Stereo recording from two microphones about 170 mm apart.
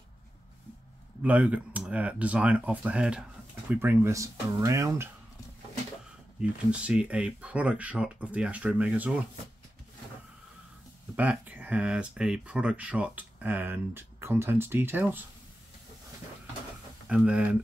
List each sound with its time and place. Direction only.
1.2 s speech: 10° right (ahead or behind)
6.7 s speech: 5° right (ahead or behind)
11.1 s speech: 10° right (ahead or behind)
17.1 s speech: 5° right (ahead or behind)